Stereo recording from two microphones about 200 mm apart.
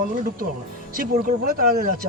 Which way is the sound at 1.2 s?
45° right (ahead or behind).